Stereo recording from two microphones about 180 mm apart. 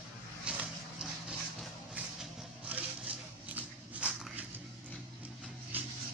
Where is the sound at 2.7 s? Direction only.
5° right (ahead or behind).